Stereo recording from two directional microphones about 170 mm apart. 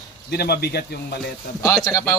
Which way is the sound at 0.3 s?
70° left (ahead or behind).